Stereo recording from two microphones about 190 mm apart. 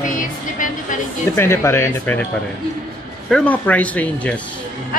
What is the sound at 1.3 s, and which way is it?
Speech, 10° left (ahead or behind).